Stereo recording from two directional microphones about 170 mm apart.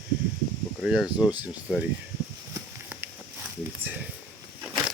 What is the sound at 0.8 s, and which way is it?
Speech, 5° right (ahead or behind).